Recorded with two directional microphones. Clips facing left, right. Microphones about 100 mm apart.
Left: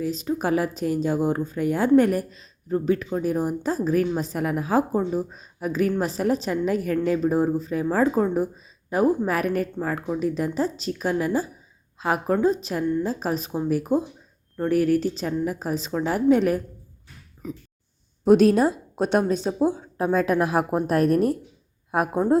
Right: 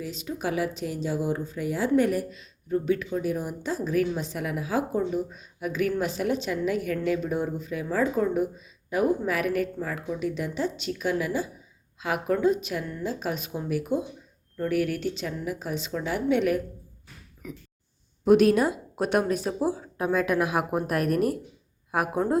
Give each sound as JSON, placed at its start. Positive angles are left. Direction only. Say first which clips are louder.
{"t": 0.0, "sound": "a woman's voice", "louder": "left 6 dB", "side_deg": 40}
{"t": 20.4, "sound": "a woman's voice", "louder": "left 4 dB", "side_deg": 35}